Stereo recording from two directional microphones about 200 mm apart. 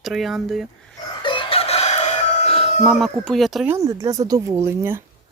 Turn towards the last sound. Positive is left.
turn(degrees=-10)  # may be behind; listen again after turning